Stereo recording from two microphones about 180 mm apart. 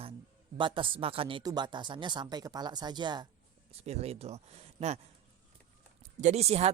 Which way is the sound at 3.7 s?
35° right (ahead or behind).